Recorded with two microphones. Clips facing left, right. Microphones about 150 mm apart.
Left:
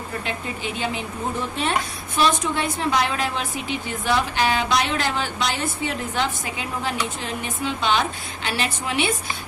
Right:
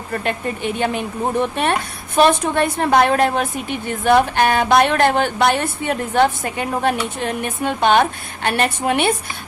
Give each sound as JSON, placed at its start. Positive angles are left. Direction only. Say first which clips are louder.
{"t": 0.1, "sound": "a woman's voice", "louder": "right 9 dB", "side_deg": -55}